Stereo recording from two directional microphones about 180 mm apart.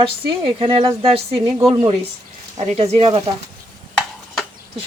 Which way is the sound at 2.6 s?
35° right (ahead or behind).